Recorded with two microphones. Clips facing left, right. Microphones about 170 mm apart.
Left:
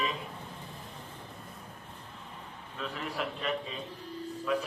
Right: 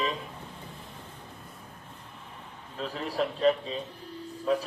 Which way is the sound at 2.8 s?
35° right (ahead or behind).